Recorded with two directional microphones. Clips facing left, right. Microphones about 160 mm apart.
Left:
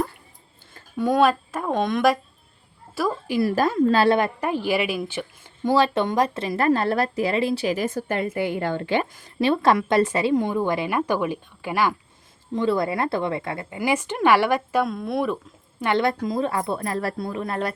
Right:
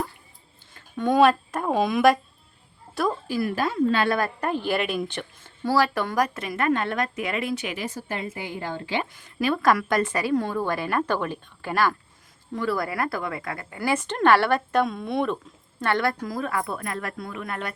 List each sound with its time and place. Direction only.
0.9 s a woman's voice: centre (ahead or behind)
3.4 s a woman's voice: 40° left (ahead or behind)
4.4 s a woman's voice: 10° left (ahead or behind)
5.6 s a woman's voice: 20° left (ahead or behind)
7.9 s a woman's voice: 55° left (ahead or behind)
9.4 s a woman's voice: 25° left (ahead or behind)
13.7 s a woman's voice: 10° left (ahead or behind)
15.8 s speech: 20° left (ahead or behind)